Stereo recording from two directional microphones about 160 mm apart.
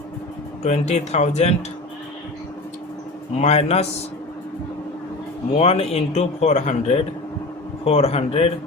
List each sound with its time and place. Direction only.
0.6 s speech: 45° left (ahead or behind)
3.3 s speech: 40° left (ahead or behind)
5.5 s speech: 40° left (ahead or behind)